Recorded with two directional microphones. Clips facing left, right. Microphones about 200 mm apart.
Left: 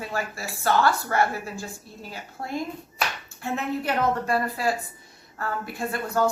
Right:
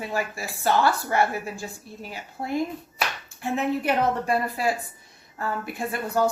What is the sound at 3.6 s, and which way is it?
Speech, 15° right (ahead or behind).